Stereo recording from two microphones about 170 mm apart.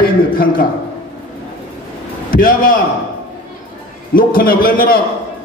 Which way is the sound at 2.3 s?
55° left (ahead or behind).